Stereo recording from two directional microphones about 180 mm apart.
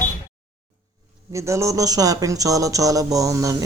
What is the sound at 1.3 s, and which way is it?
Speech, 15° right (ahead or behind).